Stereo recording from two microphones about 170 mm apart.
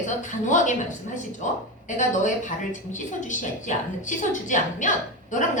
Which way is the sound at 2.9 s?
45° left (ahead or behind).